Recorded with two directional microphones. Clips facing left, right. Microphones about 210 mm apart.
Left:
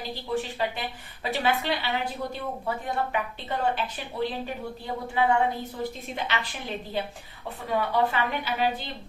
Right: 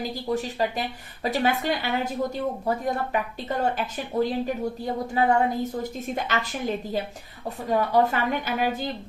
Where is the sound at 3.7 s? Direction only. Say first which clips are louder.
Right 6 dB; 45° right (ahead or behind).